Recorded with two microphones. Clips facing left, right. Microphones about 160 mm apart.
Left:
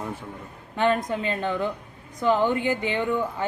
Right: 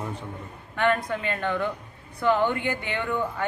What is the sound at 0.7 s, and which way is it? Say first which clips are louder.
A woman's voice: left 1 dB; 20° left (ahead or behind).